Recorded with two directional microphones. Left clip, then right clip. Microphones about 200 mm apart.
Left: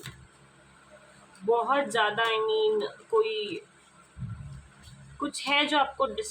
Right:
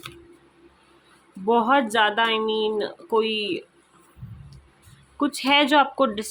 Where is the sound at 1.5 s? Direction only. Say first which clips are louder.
Right 7 dB; 40° right (ahead or behind).